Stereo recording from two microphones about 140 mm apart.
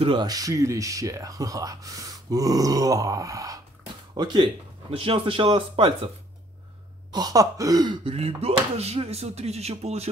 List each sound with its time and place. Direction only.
0.0 s speech: 35° right (ahead or behind)
4.9 s speech: 40° right (ahead or behind)
7.1 s speech: 25° right (ahead or behind)
8.1 s speech: 45° right (ahead or behind)